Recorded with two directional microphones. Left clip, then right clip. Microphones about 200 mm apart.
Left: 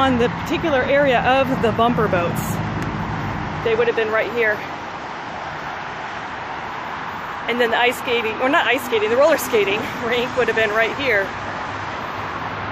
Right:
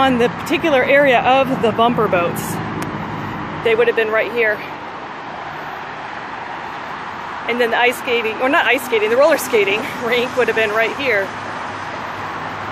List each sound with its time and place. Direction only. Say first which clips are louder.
0.0 s speech: right 3 dB; 15° right (ahead or behind)
3.6 s speech: right 4 dB; 20° right (ahead or behind)
7.4 s speech: right 2 dB; 10° right (ahead or behind)